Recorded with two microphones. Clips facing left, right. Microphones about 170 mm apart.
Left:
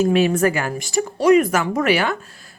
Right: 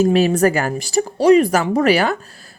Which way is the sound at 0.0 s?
35° right (ahead or behind).